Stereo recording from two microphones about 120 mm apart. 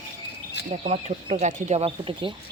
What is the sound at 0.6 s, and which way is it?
Speech, 65° right (ahead or behind).